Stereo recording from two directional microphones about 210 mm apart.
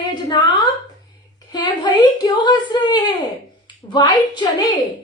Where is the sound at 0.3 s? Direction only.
20° left (ahead or behind).